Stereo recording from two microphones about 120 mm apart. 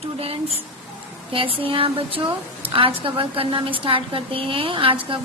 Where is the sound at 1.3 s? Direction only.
50° right (ahead or behind).